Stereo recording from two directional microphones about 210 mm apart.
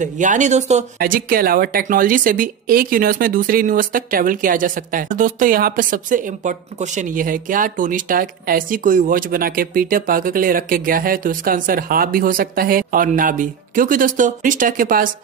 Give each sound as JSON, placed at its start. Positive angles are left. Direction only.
{"t": 0.0, "sound": "a woman's voice", "side_deg": -35}